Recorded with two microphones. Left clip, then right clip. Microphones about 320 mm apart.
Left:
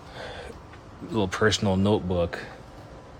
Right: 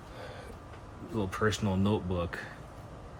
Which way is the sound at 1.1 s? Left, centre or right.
Left.